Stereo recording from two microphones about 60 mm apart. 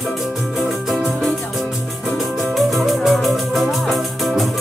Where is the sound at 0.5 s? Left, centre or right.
Centre.